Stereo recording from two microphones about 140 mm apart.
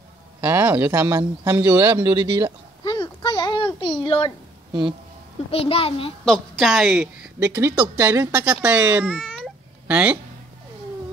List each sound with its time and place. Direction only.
0.4 s a man's voice: 15° right (ahead or behind)
2.8 s a sound: 30° left (ahead or behind)
5.5 s a child's voice: 45° left (ahead or behind)
6.2 s a woman's voice: centre (ahead or behind)
7.5 s speech: 15° right (ahead or behind)